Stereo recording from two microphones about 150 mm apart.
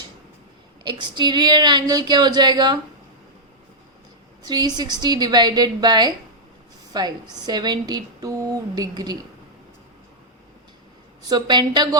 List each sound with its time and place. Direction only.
0.9 s a woman's voice: 30° right (ahead or behind)
4.4 s a woman's voice: 25° right (ahead or behind)
11.3 s a woman's voice: 30° right (ahead or behind)